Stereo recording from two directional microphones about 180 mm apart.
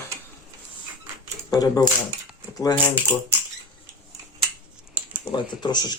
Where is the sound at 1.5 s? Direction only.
20° left (ahead or behind).